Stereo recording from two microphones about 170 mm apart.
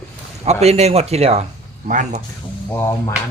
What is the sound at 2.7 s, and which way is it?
Speech, 15° left (ahead or behind).